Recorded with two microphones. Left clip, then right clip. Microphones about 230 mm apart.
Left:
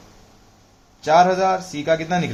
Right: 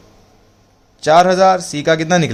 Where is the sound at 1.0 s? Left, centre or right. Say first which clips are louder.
Right 5 dB; right.